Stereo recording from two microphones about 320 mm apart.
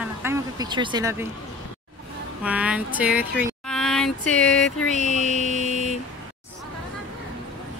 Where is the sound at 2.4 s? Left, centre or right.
Centre.